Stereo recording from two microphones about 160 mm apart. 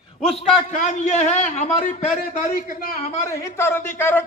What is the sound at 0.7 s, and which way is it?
A man's voice, 50° left (ahead or behind).